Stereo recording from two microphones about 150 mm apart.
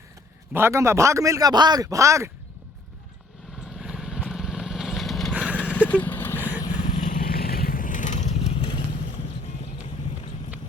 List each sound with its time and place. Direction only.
0.5 s speech: 15° right (ahead or behind)
3.8 s vehicle: 5° right (ahead or behind)
5.3 s horse: 10° right (ahead or behind)
5.9 s vehicle: 10° left (ahead or behind)
6.6 s vehicle: 25° left (ahead or behind)
6.9 s vehicle: 50° left (ahead or behind)
7.2 s vehicle: 85° left; by 8.5 s 55° left (ahead or behind)